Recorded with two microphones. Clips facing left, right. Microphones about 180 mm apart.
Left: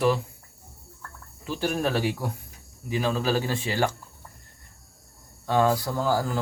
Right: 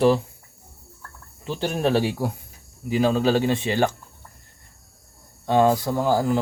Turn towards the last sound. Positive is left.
turn(degrees=-20)  # may be behind; listen again after turning